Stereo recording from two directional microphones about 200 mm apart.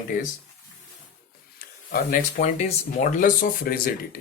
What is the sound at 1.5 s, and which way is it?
Speech, 45° left (ahead or behind).